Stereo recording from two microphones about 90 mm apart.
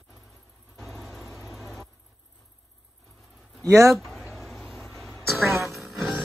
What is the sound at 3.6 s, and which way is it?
Speech, 35° right (ahead or behind).